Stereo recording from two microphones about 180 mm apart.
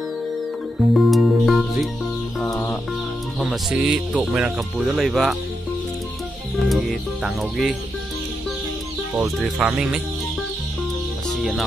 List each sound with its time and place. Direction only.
0.9 s music: centre (ahead or behind)
3.3 s speech: 5° right (ahead or behind)
6.6 s speech: centre (ahead or behind)
9.4 s speech: 5° right (ahead or behind)
11.2 s music: centre (ahead or behind)